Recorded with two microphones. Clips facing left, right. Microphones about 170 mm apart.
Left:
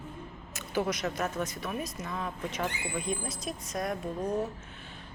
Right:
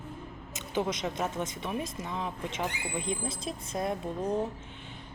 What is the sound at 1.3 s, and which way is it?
Speech, 20° right (ahead or behind).